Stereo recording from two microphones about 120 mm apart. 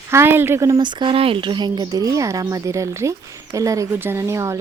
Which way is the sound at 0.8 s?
40° right (ahead or behind).